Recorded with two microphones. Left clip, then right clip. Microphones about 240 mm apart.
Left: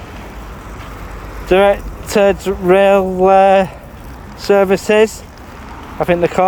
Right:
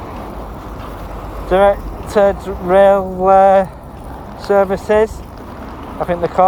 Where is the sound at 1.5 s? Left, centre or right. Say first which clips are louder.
Left 1 dB; left.